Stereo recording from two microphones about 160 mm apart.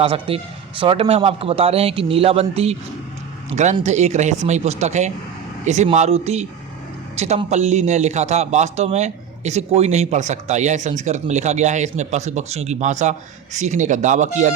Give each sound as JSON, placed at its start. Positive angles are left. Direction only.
{"t": 0.0, "sound": "a man's voice", "side_deg": -40}